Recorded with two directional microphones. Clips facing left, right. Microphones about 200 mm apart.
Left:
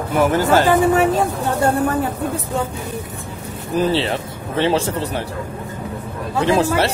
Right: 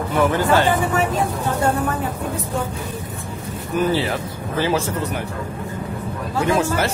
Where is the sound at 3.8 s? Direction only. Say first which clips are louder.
Left 2 dB; 30° left (ahead or behind).